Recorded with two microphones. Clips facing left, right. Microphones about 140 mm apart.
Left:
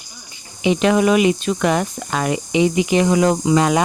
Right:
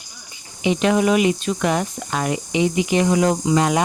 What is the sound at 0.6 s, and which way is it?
Speech, 90° left.